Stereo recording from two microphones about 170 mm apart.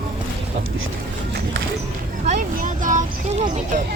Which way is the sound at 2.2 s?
45° right (ahead or behind).